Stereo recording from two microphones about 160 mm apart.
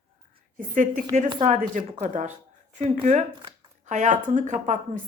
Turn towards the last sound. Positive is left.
turn(degrees=-50)  # may be behind; listen again after turning